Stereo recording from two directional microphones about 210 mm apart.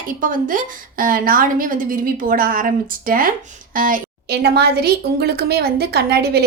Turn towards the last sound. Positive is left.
turn(degrees=-50)  # may be behind; listen again after turning